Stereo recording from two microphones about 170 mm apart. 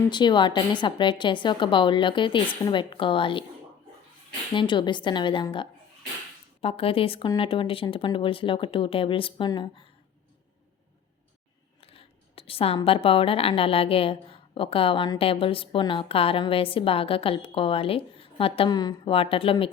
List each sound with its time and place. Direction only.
0.1 s a woman's voice: 25° left (ahead or behind)
4.5 s a woman's voice: 30° left (ahead or behind)
11.9 s speech: 35° left (ahead or behind)